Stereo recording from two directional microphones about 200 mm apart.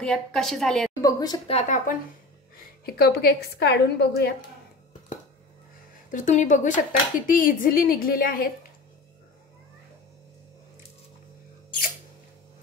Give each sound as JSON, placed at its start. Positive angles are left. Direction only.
{"t": 0.0, "sound": "a woman's voice", "side_deg": 5}
{"t": 1.0, "sound": "a woman's voice", "side_deg": 20}
{"t": 1.6, "sound": "speech", "side_deg": 40}
{"t": 2.8, "sound": "a woman's voice", "side_deg": 55}
{"t": 6.0, "sound": "a woman's voice", "side_deg": 40}